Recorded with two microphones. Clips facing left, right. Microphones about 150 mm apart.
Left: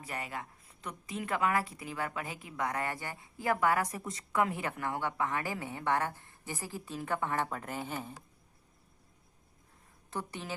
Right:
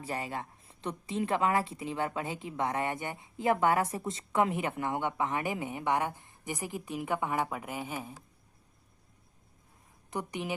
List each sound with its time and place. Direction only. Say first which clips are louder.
0.0 s a woman's voice: right 4 dB; 30° right (ahead or behind); by 8.1 s 10° right (ahead or behind)
10.1 s a woman's voice: right 4 dB; 15° right (ahead or behind)